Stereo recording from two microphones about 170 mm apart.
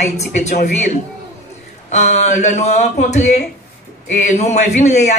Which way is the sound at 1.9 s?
45° left (ahead or behind).